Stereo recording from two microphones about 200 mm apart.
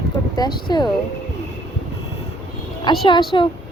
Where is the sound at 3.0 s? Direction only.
25° left (ahead or behind).